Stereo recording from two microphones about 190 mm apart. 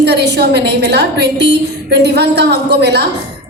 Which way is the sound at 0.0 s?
60° right (ahead or behind).